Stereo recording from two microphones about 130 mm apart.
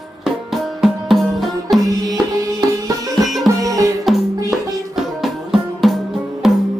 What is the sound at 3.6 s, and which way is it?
Music, 30° right (ahead or behind).